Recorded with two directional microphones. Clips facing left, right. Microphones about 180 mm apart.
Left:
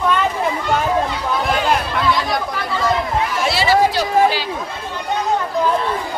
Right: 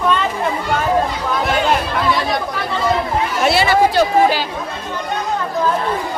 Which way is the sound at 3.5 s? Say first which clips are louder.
Right 2 dB; 55° right (ahead or behind).